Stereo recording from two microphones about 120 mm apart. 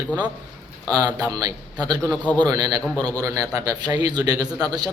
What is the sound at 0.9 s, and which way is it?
A man's voice, 30° right (ahead or behind).